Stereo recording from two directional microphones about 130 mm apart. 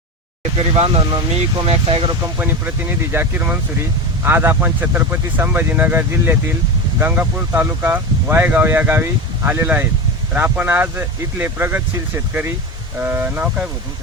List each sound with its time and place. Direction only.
0.8 s speech: 45° right (ahead or behind)
2.4 s speech: 15° right (ahead or behind)